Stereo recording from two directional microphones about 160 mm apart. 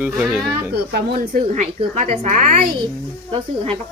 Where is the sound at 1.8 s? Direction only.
40° right (ahead or behind).